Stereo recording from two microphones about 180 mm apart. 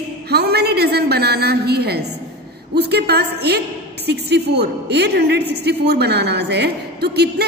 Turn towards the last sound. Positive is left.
turn(degrees=-65)  # may be behind; listen again after turning